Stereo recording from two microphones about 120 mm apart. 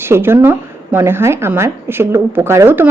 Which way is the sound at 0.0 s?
20° right (ahead or behind).